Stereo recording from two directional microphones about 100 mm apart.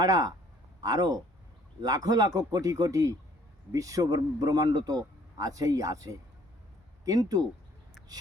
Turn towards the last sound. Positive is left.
turn(degrees=-40)  # may be behind; listen again after turning